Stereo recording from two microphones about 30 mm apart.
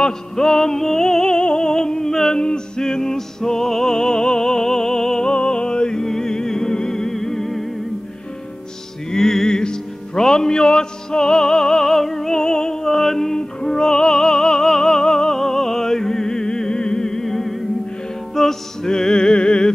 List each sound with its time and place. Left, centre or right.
0.4 s music: centre
1.4 s a sound: left
2.3 s music: left
3.9 s opera: left
5.3 s music: left
6.0 s music: centre
9.1 s music: centre
12.4 s music: left
12.9 s music: centre
13.7 s music: left
19.3 s music: left